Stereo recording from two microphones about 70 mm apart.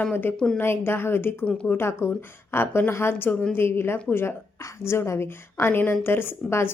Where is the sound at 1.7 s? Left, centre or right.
Left.